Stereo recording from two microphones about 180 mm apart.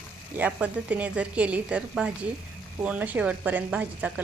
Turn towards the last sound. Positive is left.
turn(degrees=-10)  # may be behind; listen again after turning